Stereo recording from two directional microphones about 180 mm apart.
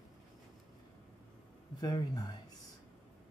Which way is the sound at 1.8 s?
25° left (ahead or behind).